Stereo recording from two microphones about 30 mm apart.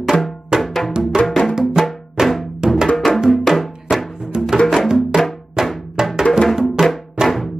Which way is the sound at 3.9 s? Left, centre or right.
Centre.